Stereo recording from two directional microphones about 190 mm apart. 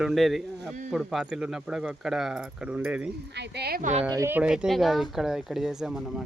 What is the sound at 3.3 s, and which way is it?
Speech, 65° right (ahead or behind).